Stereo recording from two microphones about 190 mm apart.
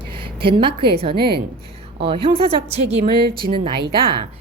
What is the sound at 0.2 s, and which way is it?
A woman's voice, 25° right (ahead or behind).